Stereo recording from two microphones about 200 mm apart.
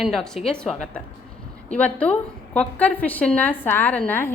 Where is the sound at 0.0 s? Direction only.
Centre (ahead or behind).